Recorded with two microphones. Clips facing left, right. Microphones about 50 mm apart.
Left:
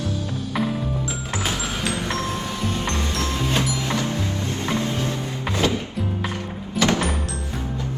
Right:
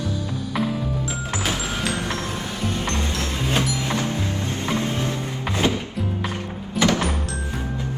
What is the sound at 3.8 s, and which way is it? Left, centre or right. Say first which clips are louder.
Music: even; right.